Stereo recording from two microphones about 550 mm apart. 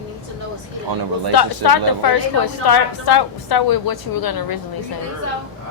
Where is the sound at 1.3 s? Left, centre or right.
Left.